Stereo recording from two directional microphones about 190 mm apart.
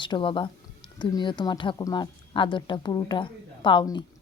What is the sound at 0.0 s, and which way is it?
A woman's voice, 25° left (ahead or behind).